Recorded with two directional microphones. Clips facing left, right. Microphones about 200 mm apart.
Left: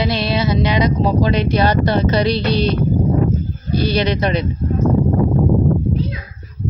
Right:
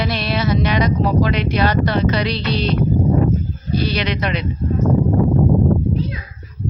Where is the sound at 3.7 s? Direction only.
45° left (ahead or behind).